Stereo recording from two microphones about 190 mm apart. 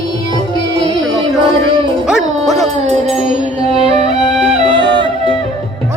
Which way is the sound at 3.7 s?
35° right (ahead or behind).